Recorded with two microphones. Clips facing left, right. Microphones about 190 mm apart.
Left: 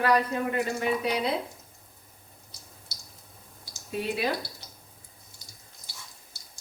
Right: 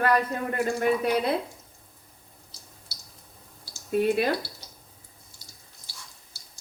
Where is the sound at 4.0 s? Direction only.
55° right (ahead or behind).